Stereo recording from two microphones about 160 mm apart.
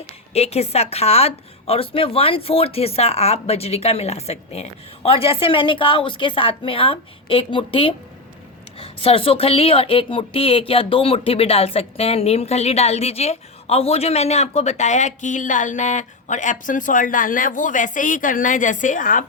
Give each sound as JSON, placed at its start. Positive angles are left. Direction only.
{"t": 0.3, "sound": "speech", "side_deg": 40}